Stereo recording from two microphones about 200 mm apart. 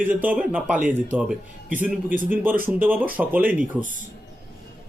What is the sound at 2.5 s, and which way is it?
Speech, 45° right (ahead or behind).